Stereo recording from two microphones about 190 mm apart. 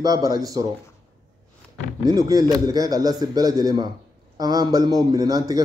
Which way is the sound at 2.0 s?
20° right (ahead or behind).